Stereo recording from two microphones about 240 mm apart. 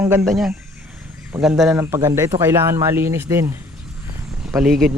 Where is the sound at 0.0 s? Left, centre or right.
Centre.